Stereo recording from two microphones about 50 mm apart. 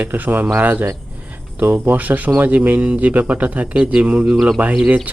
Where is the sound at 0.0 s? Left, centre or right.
Right.